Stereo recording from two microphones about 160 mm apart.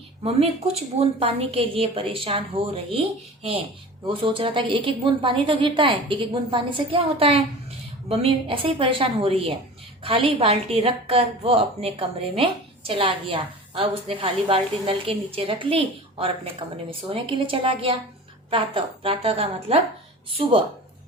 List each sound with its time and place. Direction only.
0.2 s a woman's voice: 40° right (ahead or behind)
4.0 s a woman's voice: 30° right (ahead or behind)